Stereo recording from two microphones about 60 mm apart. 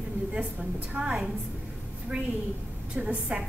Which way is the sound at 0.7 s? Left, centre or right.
Centre.